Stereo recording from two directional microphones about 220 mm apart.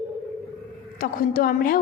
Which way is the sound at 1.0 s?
40° left (ahead or behind).